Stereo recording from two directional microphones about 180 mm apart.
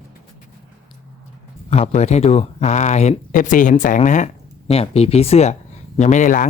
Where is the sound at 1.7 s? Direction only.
35° left (ahead or behind).